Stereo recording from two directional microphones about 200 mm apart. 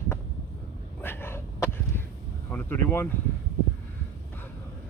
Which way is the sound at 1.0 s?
10° left (ahead or behind).